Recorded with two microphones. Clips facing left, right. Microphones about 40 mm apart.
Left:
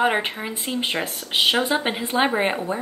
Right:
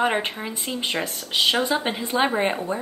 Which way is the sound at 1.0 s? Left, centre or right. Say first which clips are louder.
Even; left.